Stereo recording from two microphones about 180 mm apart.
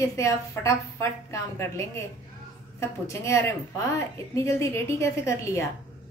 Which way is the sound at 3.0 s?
15° left (ahead or behind).